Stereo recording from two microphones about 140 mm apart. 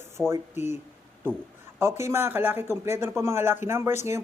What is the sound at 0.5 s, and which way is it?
Speech, 55° left (ahead or behind).